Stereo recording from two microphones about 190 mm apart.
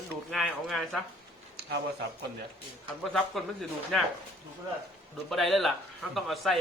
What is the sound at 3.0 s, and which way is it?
A man's voice, centre (ahead or behind).